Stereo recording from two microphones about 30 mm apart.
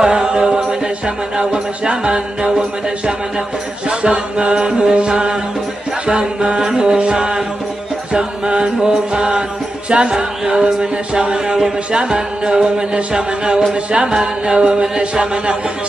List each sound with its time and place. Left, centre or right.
0.0 s music: right
3.9 s music: right
6.6 s mantra: right
9.8 s music: right
10.1 s mantra: centre
10.6 s mantra: right
11.9 s music: right
14.1 s mantra: right
14.5 s music: right